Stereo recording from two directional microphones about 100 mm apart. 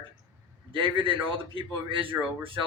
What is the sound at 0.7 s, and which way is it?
A man's voice, 60° right (ahead or behind).